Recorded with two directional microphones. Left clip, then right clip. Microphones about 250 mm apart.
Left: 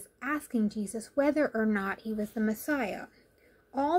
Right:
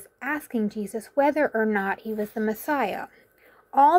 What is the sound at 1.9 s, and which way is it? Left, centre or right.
Speech, right.